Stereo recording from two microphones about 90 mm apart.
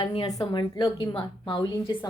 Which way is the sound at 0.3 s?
40° left (ahead or behind).